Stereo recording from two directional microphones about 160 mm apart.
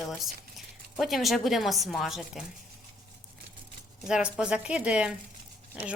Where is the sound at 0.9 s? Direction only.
Centre (ahead or behind).